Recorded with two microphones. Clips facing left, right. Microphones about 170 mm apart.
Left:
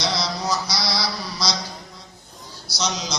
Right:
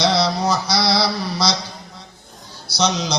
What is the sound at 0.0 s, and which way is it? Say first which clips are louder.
Mantra: right 7 dB; 60° right (ahead or behind).